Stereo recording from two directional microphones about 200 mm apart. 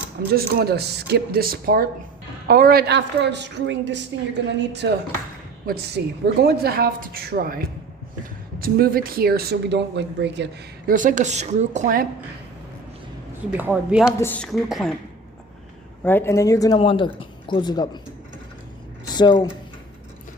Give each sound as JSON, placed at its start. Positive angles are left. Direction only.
{"t": 0.3, "sound": "a woman's voice", "side_deg": -50}
{"t": 10.9, "sound": "a woman's voice", "side_deg": -40}
{"t": 13.6, "sound": "a woman's voice", "side_deg": -5}
{"t": 14.2, "sound": "a woman's voice", "side_deg": 10}
{"t": 16.0, "sound": "speech", "side_deg": 10}
{"t": 19.0, "sound": "speech", "side_deg": 20}